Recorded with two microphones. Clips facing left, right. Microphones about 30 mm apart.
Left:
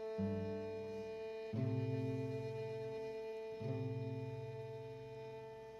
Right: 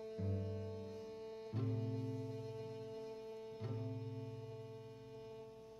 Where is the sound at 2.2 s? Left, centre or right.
Left.